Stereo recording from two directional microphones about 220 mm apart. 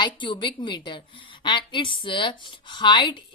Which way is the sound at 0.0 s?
20° left (ahead or behind).